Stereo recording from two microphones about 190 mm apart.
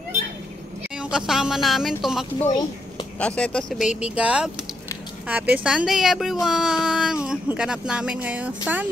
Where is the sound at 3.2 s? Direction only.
5° left (ahead or behind).